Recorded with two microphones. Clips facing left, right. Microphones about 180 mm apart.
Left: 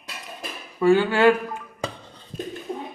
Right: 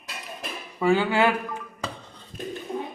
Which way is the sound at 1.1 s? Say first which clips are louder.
Left 5 dB; 20° right (ahead or behind).